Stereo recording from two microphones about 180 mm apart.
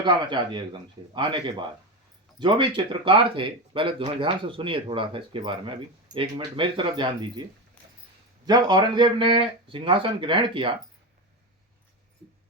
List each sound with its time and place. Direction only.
0.0 s speech: 25° right (ahead or behind)
7.8 s a sound: 10° left (ahead or behind)
8.4 s speech: 20° right (ahead or behind)